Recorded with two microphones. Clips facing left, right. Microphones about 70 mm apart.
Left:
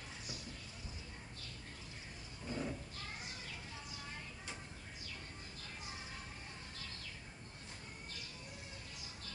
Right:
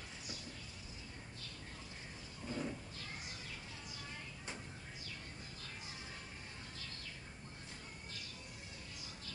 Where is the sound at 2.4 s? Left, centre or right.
Centre.